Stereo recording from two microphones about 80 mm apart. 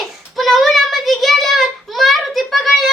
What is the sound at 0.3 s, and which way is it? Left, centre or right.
Child singing, centre.